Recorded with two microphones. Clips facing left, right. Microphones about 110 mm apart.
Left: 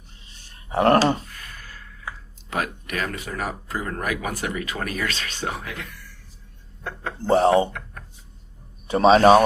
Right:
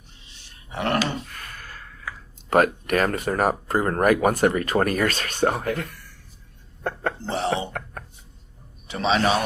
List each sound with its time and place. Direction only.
0.3 s a sound: 45° left (ahead or behind)
1.3 s gasp: 50° right (ahead or behind)
2.5 s speech: 50° right (ahead or behind)
7.3 s a man's voice: 45° left (ahead or behind)
8.9 s a man's voice: 45° left (ahead or behind)